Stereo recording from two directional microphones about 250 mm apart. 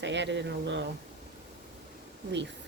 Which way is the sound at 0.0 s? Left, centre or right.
Right.